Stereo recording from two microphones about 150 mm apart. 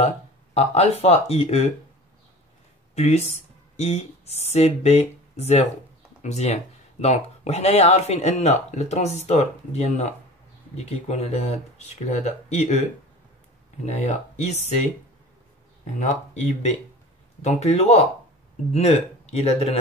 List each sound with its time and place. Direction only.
0.6 s speech: 45° left (ahead or behind)
2.9 s speech: 45° left (ahead or behind)
13.8 s speech: 50° left (ahead or behind)
17.4 s speech: 50° left (ahead or behind)